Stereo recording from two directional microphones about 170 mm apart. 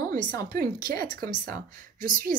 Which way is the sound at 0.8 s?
60° right (ahead or behind).